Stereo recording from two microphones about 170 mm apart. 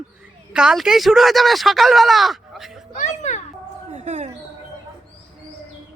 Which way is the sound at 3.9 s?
45° right (ahead or behind).